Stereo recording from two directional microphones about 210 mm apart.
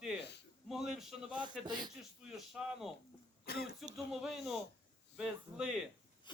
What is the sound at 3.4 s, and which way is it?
Speech, 45° left (ahead or behind).